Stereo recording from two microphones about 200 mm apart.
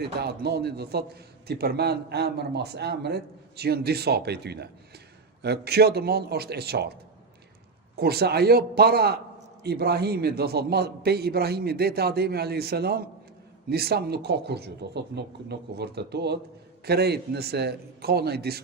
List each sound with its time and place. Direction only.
0.0 s a man's voice: 55° right (ahead or behind)
7.9 s a man's voice: 50° right (ahead or behind)